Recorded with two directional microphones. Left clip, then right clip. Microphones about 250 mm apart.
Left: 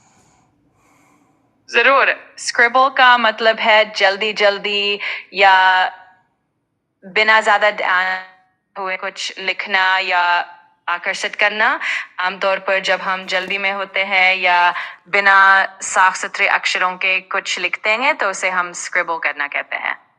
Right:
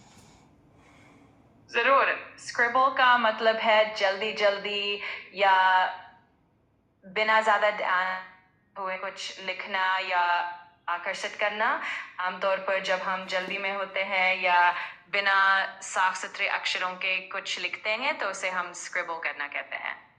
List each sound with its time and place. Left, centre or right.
1.7 s a woman's voice: left
7.0 s a woman's voice: left